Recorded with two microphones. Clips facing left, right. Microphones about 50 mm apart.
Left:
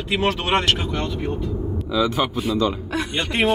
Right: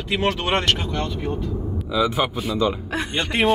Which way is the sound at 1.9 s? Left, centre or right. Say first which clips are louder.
Even; centre.